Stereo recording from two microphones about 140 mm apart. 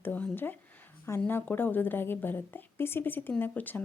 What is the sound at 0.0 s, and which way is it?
Speech, 10° left (ahead or behind).